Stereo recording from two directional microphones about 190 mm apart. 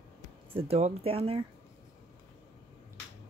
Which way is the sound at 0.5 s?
35° right (ahead or behind).